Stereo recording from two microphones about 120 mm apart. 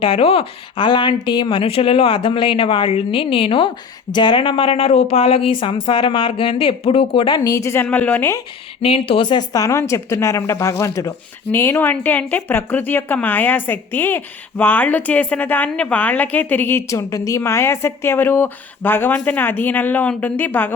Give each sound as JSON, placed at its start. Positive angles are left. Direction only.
{"t": 0.0, "sound": "a woman's voice", "side_deg": 50}
{"t": 8.8, "sound": "speech", "side_deg": 50}
{"t": 9.5, "sound": "a woman's voice", "side_deg": 30}